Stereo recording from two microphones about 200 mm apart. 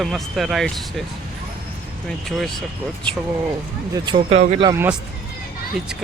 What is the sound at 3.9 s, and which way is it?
Speech, 25° right (ahead or behind).